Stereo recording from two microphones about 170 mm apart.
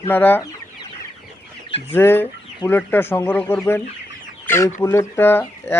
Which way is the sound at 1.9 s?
15° left (ahead or behind).